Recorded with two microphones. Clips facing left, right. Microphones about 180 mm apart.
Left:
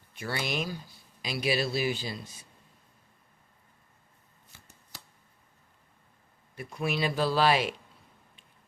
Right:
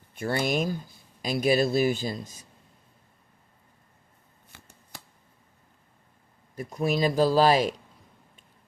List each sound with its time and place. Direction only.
0.1 s a man's voice: 50° right (ahead or behind)
4.5 s shuffling cards: 65° right (ahead or behind)
4.9 s a sound: 55° right (ahead or behind)
6.6 s speech: 40° right (ahead or behind)